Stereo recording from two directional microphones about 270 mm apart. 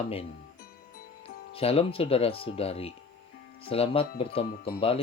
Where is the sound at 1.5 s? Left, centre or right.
Left.